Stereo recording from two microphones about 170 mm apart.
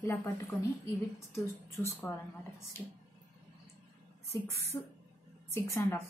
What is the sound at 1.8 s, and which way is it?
Speech, 15° left (ahead or behind).